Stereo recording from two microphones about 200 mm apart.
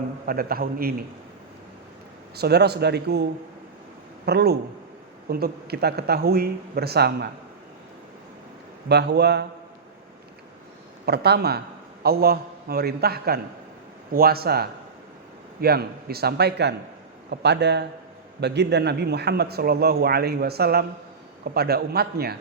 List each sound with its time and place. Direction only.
0.3 s a man's voice: 50° right (ahead or behind)
2.3 s speech: 55° right (ahead or behind)
4.3 s a man's voice: 55° right (ahead or behind)
8.9 s speech: 55° right (ahead or behind)
11.0 s a man's voice: 55° right (ahead or behind)